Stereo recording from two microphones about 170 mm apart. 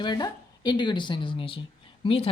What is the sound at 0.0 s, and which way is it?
A woman's voice, 25° left (ahead or behind).